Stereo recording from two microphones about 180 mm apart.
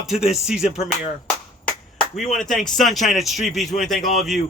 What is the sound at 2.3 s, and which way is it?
Speech, centre (ahead or behind).